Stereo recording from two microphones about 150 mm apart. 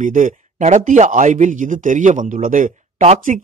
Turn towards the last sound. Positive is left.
turn(degrees=-55)  # may be behind; listen again after turning